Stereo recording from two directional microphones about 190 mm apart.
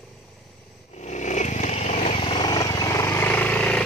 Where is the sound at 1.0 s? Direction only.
40° left (ahead or behind).